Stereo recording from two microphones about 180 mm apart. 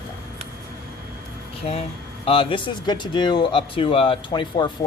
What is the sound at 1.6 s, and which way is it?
Speech, 35° left (ahead or behind).